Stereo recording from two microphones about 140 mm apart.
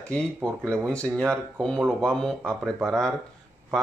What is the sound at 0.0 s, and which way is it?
Speech, 5° left (ahead or behind).